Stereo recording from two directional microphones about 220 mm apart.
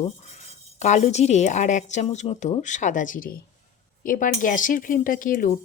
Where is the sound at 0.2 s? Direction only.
30° left (ahead or behind).